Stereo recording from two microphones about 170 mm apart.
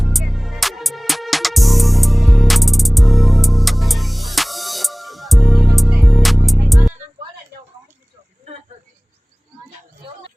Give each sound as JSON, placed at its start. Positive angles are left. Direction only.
{"t": 0.0, "sound": "music", "side_deg": 0}